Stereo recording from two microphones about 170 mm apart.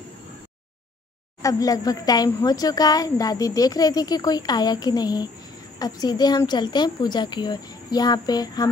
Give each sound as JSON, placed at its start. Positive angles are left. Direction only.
{"t": 1.4, "sound": "speech", "side_deg": 20}